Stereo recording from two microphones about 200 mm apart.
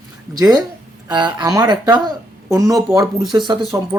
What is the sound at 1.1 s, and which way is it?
Speech, 20° right (ahead or behind).